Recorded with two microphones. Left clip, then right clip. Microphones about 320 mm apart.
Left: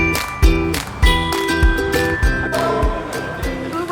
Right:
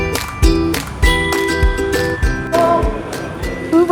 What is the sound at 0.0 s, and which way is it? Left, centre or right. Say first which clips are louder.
Music: even; centre.